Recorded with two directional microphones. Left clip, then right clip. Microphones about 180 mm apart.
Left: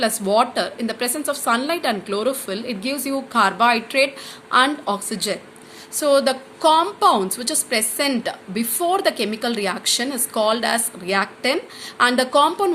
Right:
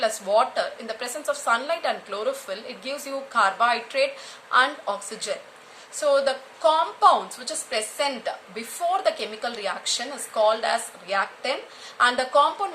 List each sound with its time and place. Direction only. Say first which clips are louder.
0.0 s a woman's voice: left 3 dB; 30° left (ahead or behind)